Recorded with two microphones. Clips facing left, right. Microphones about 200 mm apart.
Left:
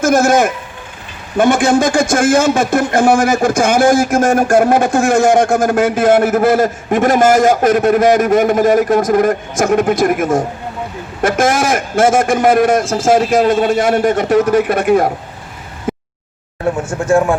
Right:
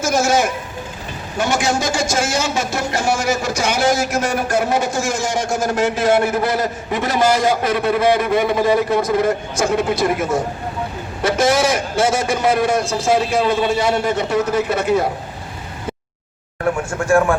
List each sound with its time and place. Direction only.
0.0 s speech: 55° left (ahead or behind)
17.1 s speech: 20° left (ahead or behind)